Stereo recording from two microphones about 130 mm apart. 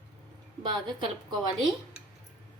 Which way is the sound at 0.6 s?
35° right (ahead or behind).